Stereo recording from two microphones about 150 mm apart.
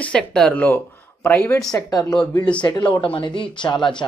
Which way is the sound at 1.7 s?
25° left (ahead or behind).